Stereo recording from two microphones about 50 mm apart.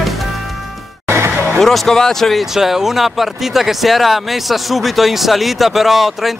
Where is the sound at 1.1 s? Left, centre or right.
Right.